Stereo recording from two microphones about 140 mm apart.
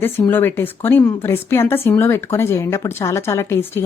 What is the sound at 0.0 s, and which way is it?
A woman's voice, 15° left (ahead or behind).